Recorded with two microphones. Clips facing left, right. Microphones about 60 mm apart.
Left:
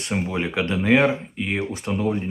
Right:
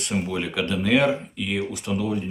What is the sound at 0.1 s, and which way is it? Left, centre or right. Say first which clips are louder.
Speech: left 2 dB; left.